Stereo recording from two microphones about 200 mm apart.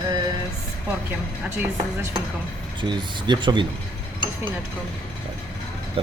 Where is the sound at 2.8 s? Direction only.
25° right (ahead or behind).